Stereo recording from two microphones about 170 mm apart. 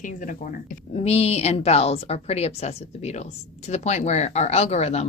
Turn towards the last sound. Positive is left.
turn(degrees=40)  # may be behind; listen again after turning